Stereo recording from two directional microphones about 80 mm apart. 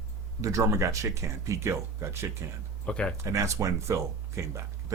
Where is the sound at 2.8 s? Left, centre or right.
Centre.